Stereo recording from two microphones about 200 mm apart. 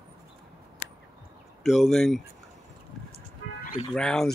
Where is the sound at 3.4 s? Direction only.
70° left (ahead or behind).